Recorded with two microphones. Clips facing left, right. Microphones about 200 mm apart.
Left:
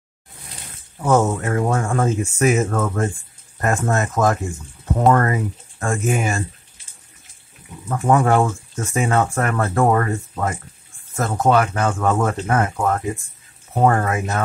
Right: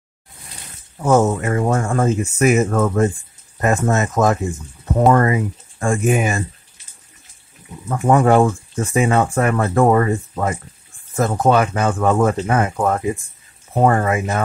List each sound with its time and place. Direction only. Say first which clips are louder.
1.0 s speech: right 2 dB; 10° right (ahead or behind)
7.9 s speech: right 3 dB; 15° right (ahead or behind)